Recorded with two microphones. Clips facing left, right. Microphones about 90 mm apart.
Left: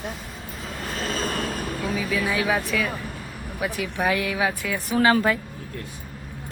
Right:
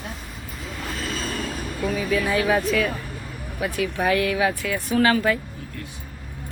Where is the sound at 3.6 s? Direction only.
20° left (ahead or behind).